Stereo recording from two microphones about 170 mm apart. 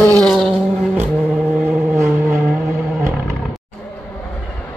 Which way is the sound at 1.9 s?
15° right (ahead or behind).